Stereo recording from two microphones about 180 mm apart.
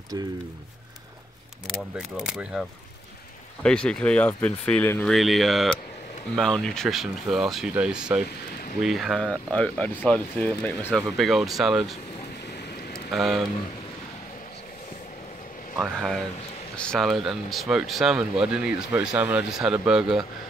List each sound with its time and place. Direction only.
1.7 s speech: 5° right (ahead or behind)
3.6 s speech: 5° left (ahead or behind)
12.9 s a sound: centre (ahead or behind)
15.8 s speech: centre (ahead or behind)